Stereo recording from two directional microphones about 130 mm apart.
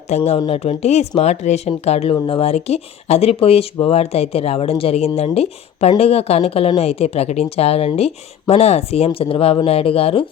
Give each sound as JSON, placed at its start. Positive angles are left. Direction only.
{"t": 0.3, "sound": "speech", "side_deg": 35}
{"t": 0.6, "sound": "speech", "side_deg": 55}